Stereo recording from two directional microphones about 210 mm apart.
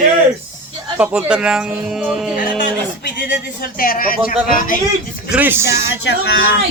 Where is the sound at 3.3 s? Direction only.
45° left (ahead or behind).